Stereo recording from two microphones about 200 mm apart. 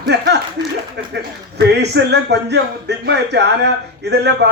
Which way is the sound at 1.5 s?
55° right (ahead or behind).